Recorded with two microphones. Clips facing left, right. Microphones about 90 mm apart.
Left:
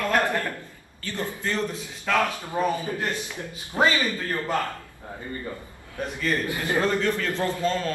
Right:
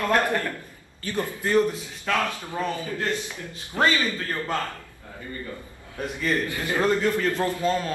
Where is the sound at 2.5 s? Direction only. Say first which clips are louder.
Left 4 dB; 20° left (ahead or behind).